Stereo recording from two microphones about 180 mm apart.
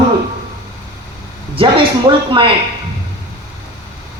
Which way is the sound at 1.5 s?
30° right (ahead or behind).